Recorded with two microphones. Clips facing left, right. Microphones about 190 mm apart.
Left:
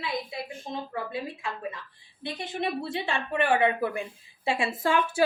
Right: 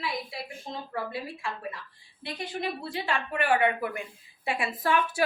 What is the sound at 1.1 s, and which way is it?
Speech, 20° left (ahead or behind).